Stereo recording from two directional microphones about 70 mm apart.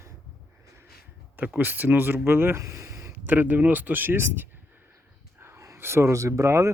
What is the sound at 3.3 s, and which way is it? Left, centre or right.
Speech, right.